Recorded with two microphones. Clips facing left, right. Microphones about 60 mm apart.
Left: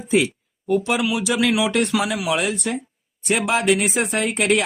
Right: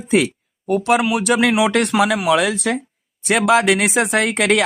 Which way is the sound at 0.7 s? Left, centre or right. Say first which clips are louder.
Right 4 dB; right.